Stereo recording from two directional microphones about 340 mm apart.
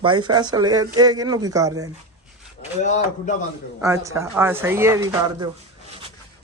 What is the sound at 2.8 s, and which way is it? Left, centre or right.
Speech, left.